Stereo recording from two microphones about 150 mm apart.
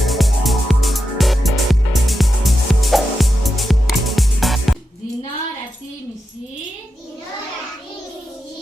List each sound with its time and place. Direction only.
0.0 s music: centre (ahead or behind)